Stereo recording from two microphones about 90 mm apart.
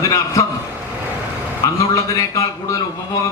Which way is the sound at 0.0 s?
40° left (ahead or behind).